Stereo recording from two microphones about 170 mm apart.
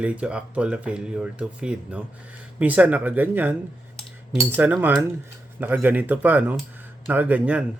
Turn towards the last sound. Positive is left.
turn(degrees=-10)  # may be behind; listen again after turning